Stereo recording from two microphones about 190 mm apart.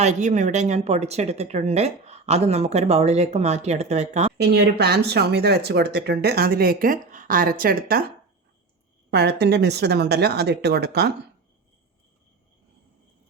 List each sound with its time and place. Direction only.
0.0 s a woman's voice: 40° right (ahead or behind)
4.4 s speech: 60° right (ahead or behind)
9.0 s speech: 60° right (ahead or behind)